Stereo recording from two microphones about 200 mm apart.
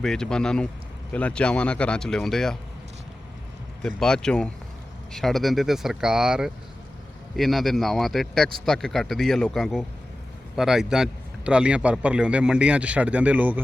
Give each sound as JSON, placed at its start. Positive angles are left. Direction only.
{"t": 0.0, "sound": "a man's voice", "side_deg": 5}
{"t": 3.8, "sound": "a man's voice", "side_deg": 5}